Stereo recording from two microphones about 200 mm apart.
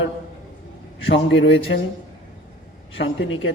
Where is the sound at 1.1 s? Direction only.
65° left (ahead or behind).